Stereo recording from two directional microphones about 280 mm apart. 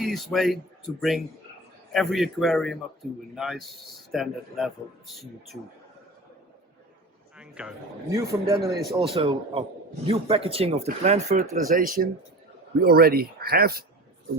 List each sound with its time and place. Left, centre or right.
0.0 s a man's voice: centre
7.3 s a man's voice: centre
9.1 s a man's voice: centre